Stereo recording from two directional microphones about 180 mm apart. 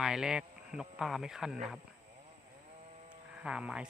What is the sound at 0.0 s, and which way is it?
Speech, 5° right (ahead or behind).